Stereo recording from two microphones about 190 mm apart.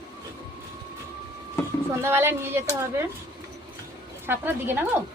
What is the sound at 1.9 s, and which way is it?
Speech, 15° right (ahead or behind).